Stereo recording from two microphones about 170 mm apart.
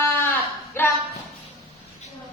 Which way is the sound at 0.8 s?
15° left (ahead or behind).